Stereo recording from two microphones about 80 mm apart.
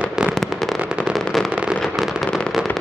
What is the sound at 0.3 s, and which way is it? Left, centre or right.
Fireworks, centre.